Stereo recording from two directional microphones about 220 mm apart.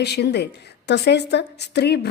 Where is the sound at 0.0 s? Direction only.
50° left (ahead or behind).